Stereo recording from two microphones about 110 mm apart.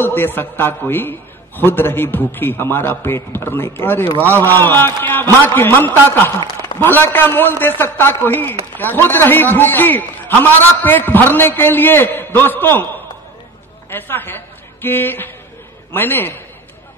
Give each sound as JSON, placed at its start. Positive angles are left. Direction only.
{"t": 0.0, "sound": "a man's voice", "side_deg": 20}
{"t": 13.8, "sound": "a woman's voice", "side_deg": 20}